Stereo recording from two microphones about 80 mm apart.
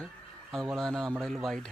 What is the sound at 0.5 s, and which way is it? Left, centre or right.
Speech, centre.